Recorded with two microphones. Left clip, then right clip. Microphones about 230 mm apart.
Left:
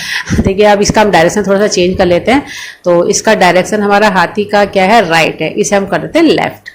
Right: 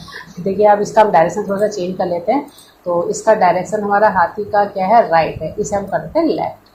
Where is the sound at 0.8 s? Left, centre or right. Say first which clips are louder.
Left 4 dB; left.